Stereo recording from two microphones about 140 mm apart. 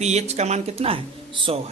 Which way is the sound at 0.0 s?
50° right (ahead or behind).